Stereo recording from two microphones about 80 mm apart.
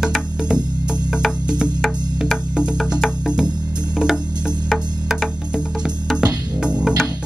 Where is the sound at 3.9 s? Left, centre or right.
Centre.